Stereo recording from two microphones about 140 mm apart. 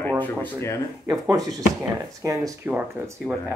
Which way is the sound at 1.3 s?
25° right (ahead or behind).